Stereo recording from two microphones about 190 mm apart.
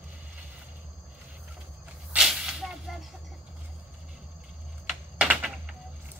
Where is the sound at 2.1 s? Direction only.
5° right (ahead or behind).